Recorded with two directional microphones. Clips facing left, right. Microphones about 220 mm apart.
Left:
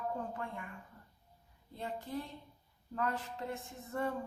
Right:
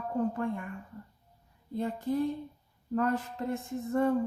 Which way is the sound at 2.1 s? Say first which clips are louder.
Right 12 dB; 50° right (ahead or behind).